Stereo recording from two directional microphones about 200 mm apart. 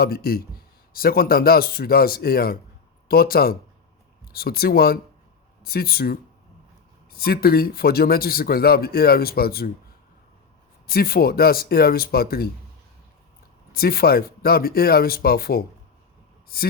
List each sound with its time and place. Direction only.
0.0 s speech: 50° left (ahead or behind)
10.8 s speech: 50° left (ahead or behind)
13.7 s speech: 50° left (ahead or behind)